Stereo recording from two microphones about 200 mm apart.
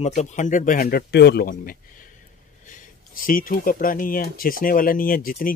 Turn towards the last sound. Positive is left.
turn(degrees=45)  # may be behind; listen again after turning